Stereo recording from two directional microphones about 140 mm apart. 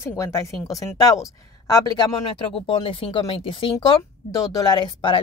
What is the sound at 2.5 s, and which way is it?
Speech, 40° left (ahead or behind).